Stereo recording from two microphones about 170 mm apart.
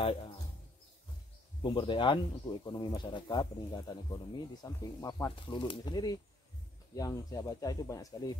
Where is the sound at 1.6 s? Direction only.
30° left (ahead or behind).